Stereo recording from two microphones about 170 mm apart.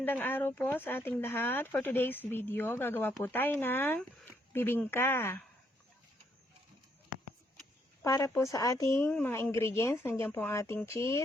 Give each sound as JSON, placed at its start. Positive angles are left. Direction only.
{"t": 0.0, "sound": "speech", "side_deg": 10}
{"t": 8.0, "sound": "a woman's voice", "side_deg": 20}